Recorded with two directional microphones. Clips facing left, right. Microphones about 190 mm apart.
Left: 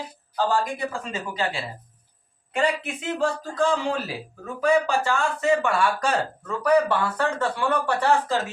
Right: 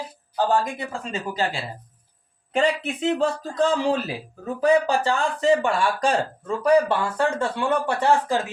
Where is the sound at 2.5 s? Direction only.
25° right (ahead or behind).